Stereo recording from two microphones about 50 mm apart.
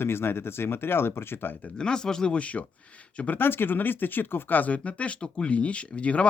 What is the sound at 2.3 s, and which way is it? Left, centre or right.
Speech, left.